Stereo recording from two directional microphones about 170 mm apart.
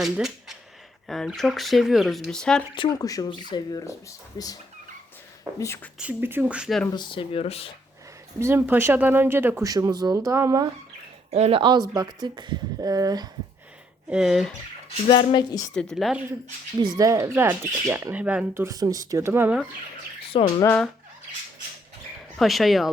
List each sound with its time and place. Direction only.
0.0 s speech: 5° right (ahead or behind)
2.7 s speech: 25° left (ahead or behind)
5.5 s speech: 15° left (ahead or behind)
6.0 s speech: 10° right (ahead or behind)
6.9 s speech: 25° left (ahead or behind)
8.4 s speech: 15° right (ahead or behind)
11.3 s speech: 40° right (ahead or behind); by 13.2 s 20° right (ahead or behind)
14.1 s speech: centre (ahead or behind)
15.0 s speech: 30° left (ahead or behind)
15.7 s speech: 5° left (ahead or behind)
16.8 s speech: 20° right (ahead or behind)
20.3 s speech: 35° left (ahead or behind)
22.4 s speech: centre (ahead or behind)